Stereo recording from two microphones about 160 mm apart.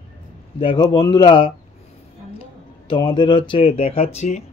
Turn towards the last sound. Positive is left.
turn(degrees=45)  # may be behind; listen again after turning